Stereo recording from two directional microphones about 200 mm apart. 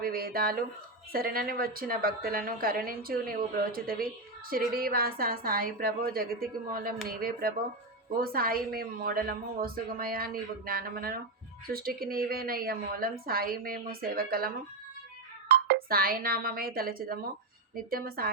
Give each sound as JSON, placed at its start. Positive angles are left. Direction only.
{"t": 0.0, "sound": "a woman's voice", "side_deg": -45}